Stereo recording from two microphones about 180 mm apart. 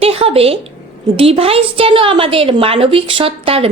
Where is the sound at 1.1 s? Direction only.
35° right (ahead or behind).